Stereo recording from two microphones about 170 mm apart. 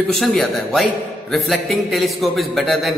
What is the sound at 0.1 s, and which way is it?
A man's voice, centre (ahead or behind).